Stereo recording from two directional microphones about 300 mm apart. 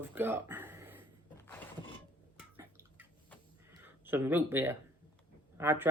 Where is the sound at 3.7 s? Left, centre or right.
Centre.